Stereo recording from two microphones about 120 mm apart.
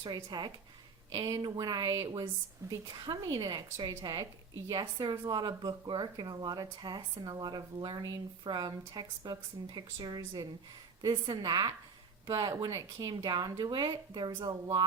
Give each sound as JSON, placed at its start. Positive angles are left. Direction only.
{"t": 0.0, "sound": "speech", "side_deg": -35}